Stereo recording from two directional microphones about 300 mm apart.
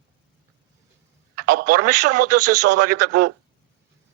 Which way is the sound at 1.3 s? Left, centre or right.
Right.